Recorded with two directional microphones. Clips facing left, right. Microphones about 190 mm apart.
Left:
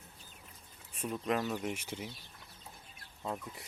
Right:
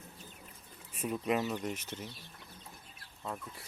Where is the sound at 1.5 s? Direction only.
10° left (ahead or behind).